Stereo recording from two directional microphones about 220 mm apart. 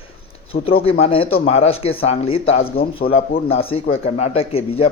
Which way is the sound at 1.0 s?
25° left (ahead or behind).